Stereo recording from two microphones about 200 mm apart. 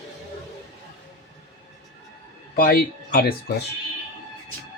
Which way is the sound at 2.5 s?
45° left (ahead or behind).